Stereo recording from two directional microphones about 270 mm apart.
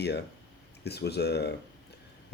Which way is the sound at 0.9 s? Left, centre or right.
Left.